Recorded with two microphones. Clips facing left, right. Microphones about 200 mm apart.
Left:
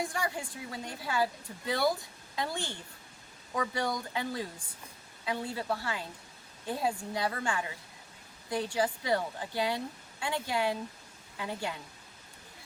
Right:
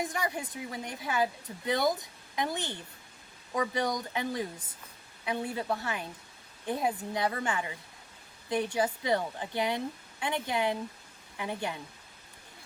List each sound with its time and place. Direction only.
0.0 s a woman's voice: 20° right (ahead or behind)